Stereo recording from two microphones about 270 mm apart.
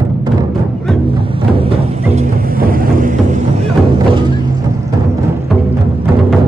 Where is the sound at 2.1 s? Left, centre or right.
Right.